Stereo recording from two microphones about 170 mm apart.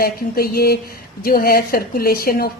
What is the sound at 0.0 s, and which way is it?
Speech, 60° left (ahead or behind).